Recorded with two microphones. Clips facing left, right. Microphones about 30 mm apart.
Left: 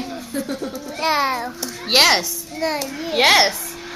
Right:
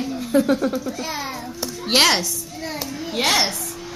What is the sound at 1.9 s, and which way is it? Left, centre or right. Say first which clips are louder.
Speech: left 2 dB; centre.